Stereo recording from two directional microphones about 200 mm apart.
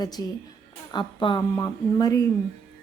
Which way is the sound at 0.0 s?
20° left (ahead or behind).